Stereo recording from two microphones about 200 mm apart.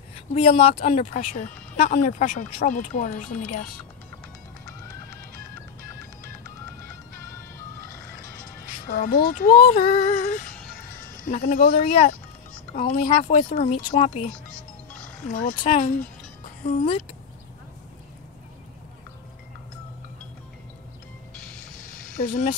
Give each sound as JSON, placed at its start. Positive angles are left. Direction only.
{"t": 0.4, "sound": "speech", "side_deg": 30}
{"t": 0.8, "sound": "speech", "side_deg": 40}
{"t": 8.8, "sound": "speech", "side_deg": 45}
{"t": 11.7, "sound": "speech", "side_deg": 30}
{"t": 12.7, "sound": "speech", "side_deg": 40}
{"t": 13.8, "sound": "speech", "side_deg": 30}
{"t": 22.2, "sound": "speech", "side_deg": 35}